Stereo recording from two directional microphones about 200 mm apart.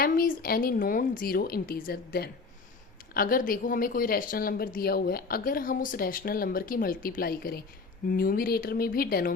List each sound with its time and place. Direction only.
0.0 s a woman's voice: 45° left (ahead or behind)